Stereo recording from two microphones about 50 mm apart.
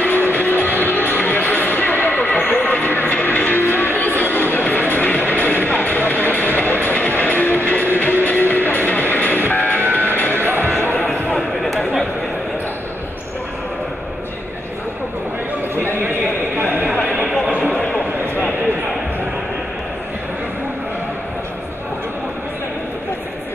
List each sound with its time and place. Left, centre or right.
0.0 s music: left
9.5 s vehicle: left
9.9 s music: left
10.3 s music: right
11.3 s a sound: centre
15.7 s a sound: right